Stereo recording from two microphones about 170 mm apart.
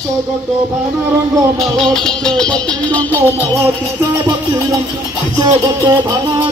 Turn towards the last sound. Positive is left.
turn(degrees=-20)  # may be behind; listen again after turning